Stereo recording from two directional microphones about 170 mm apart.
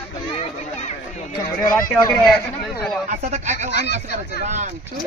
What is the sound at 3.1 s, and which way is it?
Speech, 45° right (ahead or behind).